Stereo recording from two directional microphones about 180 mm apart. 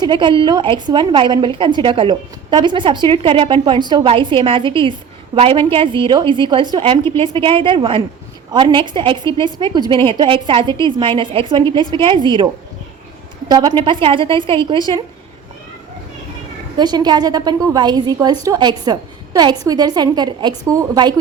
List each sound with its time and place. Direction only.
0.0 s a woman's voice: 25° right (ahead or behind)
7.0 s a woman's voice: 15° left (ahead or behind)
7.3 s a woman's voice: 30° right (ahead or behind)
13.5 s a woman's voice: 25° right (ahead or behind)
16.7 s a woman's voice: 25° right (ahead or behind)